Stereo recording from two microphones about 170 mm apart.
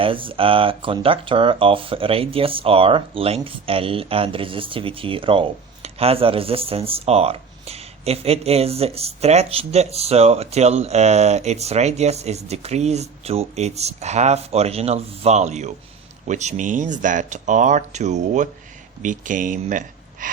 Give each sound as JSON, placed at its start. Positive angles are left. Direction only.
{"t": 0.0, "sound": "speech", "side_deg": -30}